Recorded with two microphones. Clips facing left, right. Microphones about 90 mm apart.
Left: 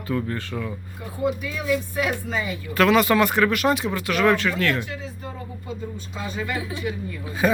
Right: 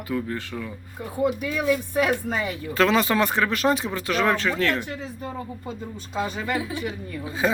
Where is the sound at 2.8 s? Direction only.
25° right (ahead or behind).